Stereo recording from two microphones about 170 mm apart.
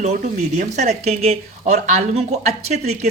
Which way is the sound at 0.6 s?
45° right (ahead or behind).